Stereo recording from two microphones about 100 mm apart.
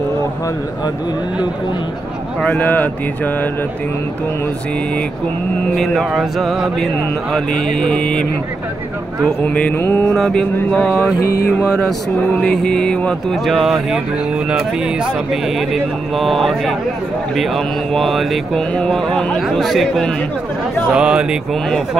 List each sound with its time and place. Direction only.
2.4 s mantra: 15° left (ahead or behind)
5.8 s speech: centre (ahead or behind)
7.3 s mantra: 5° left (ahead or behind)
9.4 s mantra: 15° left (ahead or behind)
10.0 s mantra: 5° left (ahead or behind)
13.5 s speech: 5° right (ahead or behind)
15.4 s speech: centre (ahead or behind)